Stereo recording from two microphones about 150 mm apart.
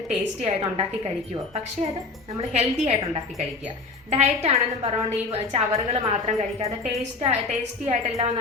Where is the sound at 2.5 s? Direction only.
45° right (ahead or behind).